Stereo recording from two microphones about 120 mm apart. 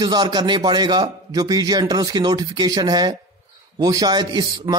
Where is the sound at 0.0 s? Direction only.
40° right (ahead or behind).